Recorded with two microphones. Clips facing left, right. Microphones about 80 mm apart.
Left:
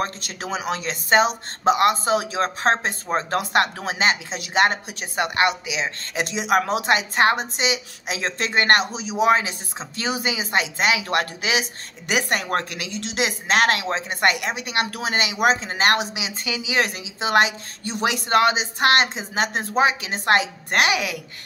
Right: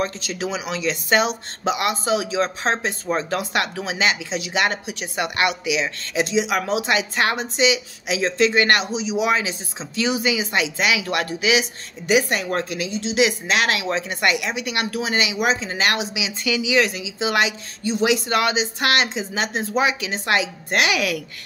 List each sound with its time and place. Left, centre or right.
0.0 s speech: left
6.1 s speech: left
12.1 s a woman's voice: left
13.2 s a woman's voice: left
19.7 s a woman's voice: left
20.9 s speech: left